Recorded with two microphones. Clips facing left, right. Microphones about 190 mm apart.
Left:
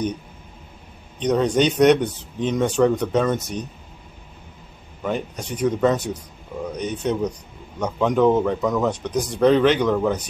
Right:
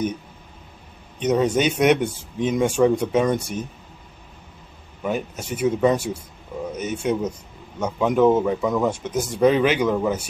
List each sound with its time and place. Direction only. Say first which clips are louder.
1.2 s speech: left 1 dB; 10° right (ahead or behind)
5.0 s speech: even; 5° right (ahead or behind)